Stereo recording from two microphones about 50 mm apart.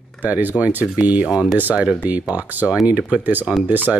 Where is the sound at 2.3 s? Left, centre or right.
Right.